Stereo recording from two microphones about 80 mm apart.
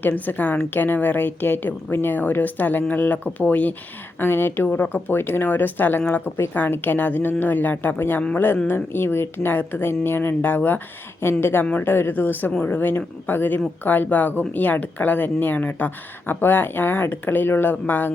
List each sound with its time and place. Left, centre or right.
0.0 s a woman's voice: left